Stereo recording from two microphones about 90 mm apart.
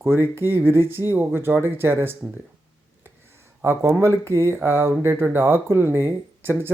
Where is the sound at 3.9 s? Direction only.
30° right (ahead or behind).